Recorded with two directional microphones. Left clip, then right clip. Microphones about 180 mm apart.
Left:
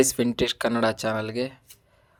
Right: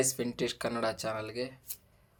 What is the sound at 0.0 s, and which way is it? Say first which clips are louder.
Speech: left 9 dB; 50° left (ahead or behind).